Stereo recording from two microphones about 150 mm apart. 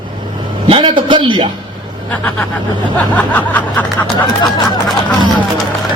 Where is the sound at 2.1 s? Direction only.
10° left (ahead or behind).